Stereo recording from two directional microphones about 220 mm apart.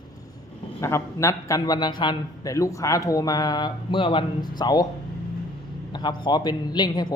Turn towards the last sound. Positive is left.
turn(degrees=20)  # may be behind; listen again after turning